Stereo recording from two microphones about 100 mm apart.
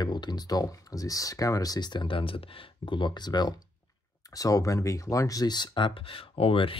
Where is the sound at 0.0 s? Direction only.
45° left (ahead or behind).